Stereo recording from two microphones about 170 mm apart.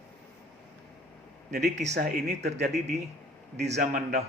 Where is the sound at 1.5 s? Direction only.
80° right.